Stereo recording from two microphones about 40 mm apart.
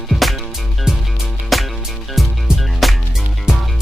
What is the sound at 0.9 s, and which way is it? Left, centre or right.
Music, centre.